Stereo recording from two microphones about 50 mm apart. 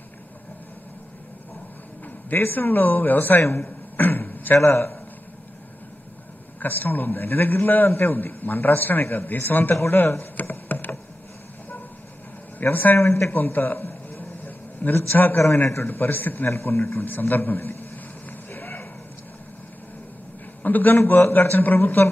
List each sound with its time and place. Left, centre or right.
2.3 s speech: left
3.9 s a sound: left
4.6 s a man's voice: left
6.6 s a man's voice: left
9.8 s speech: left
10.7 s a sound: left
12.6 s speech: left
13.3 s a man's voice: left
14.4 s a sound: left
15.1 s a man's voice: left
16.4 s a man's voice: left
18.5 s a sound: left
20.6 s a man's voice: left